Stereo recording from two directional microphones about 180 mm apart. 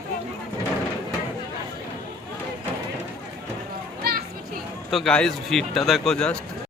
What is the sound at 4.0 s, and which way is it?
Children playing, 60° right (ahead or behind).